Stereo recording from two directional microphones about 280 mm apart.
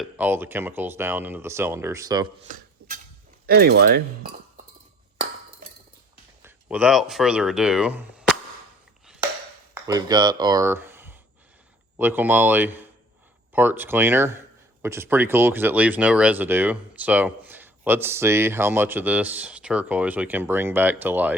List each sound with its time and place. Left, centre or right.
0.0 s speech: centre
3.4 s speech: right
6.4 s speech: centre
9.7 s speech: centre